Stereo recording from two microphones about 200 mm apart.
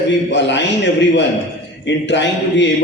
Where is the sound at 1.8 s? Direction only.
60° left (ahead or behind).